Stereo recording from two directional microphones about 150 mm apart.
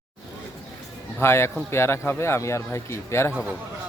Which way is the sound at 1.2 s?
15° left (ahead or behind).